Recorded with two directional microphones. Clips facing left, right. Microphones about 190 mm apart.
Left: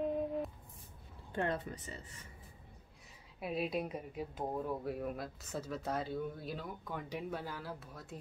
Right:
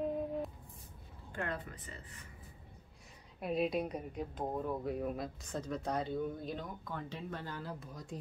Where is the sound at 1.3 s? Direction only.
25° left (ahead or behind).